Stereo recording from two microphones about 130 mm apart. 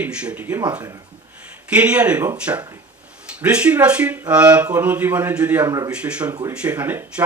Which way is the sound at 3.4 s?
10° right (ahead or behind).